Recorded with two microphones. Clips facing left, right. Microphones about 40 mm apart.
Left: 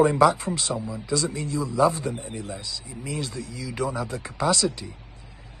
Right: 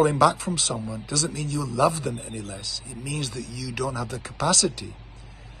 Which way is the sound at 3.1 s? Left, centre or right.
Right.